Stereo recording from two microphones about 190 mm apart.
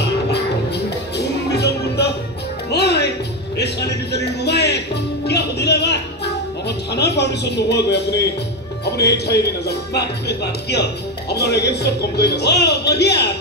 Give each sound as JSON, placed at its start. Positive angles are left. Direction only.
{"t": 1.1, "sound": "music", "side_deg": 60}
{"t": 6.9, "sound": "a sound", "side_deg": 60}
{"t": 8.8, "sound": "speech", "side_deg": 60}